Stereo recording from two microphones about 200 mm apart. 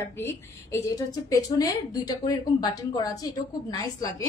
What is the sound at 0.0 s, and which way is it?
A woman's voice, 15° left (ahead or behind).